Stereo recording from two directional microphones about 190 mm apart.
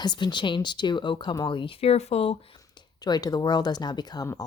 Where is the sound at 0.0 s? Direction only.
25° left (ahead or behind).